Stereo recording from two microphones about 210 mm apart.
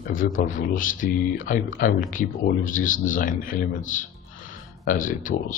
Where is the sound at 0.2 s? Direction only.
40° left (ahead or behind).